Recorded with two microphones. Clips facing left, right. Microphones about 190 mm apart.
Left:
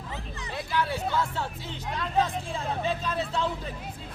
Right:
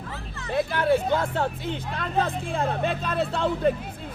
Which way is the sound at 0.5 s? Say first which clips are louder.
Right 8 dB; 55° right (ahead or behind).